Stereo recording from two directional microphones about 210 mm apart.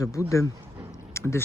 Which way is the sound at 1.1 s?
15° left (ahead or behind).